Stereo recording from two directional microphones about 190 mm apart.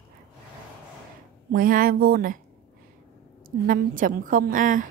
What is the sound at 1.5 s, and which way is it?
Speech, 50° right (ahead or behind).